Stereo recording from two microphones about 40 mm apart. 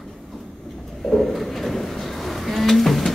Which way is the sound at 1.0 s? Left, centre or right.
Centre.